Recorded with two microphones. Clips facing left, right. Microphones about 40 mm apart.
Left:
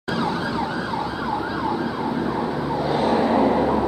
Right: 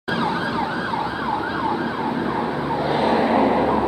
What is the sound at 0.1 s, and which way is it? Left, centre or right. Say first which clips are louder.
Ambulance: right 2 dB; right.